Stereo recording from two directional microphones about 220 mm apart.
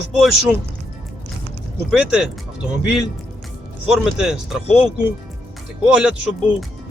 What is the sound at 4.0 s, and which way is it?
Speech, centre (ahead or behind).